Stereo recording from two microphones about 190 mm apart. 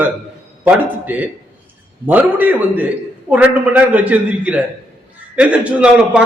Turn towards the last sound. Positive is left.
turn(degrees=-5)  # may be behind; listen again after turning